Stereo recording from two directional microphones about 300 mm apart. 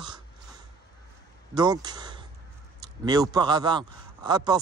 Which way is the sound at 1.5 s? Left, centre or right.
Centre.